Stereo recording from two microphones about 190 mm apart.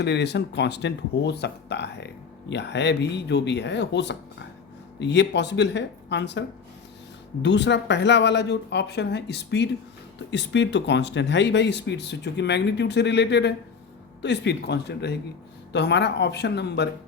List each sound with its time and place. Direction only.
0.0 s speech: 60° left (ahead or behind)
7.4 s speech: 65° left (ahead or behind)